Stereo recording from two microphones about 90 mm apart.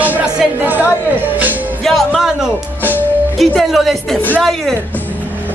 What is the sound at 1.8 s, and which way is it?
Music, 5° left (ahead or behind).